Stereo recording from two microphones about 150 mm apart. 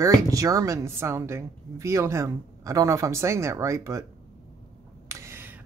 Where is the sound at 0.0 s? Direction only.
20° right (ahead or behind).